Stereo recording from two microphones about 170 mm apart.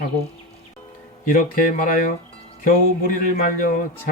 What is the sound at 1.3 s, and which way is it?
Speech, 55° left (ahead or behind).